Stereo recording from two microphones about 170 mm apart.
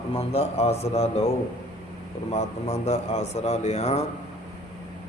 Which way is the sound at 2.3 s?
40° left (ahead or behind).